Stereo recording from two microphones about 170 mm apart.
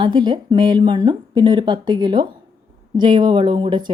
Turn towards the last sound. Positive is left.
turn(degrees=-30)  # may be behind; listen again after turning